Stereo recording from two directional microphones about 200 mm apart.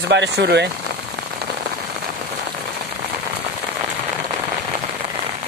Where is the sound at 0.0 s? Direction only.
60° right (ahead or behind).